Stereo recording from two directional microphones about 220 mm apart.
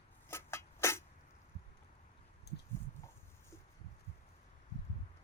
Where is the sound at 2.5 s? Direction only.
50° left (ahead or behind).